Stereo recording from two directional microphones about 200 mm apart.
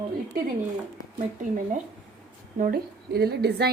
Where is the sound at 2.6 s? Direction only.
50° right (ahead or behind).